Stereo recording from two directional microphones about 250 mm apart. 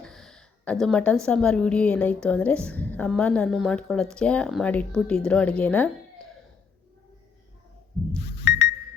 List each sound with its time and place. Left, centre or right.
0.0 s a woman's voice: centre
8.2 s alarm clock: left